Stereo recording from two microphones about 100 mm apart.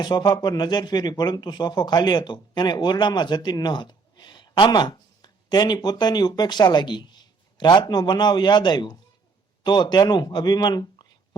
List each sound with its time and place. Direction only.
0.0 s a man's voice: 45° left (ahead or behind)